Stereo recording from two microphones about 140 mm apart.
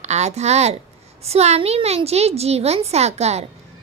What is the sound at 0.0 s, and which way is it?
A woman's voice, 55° right (ahead or behind).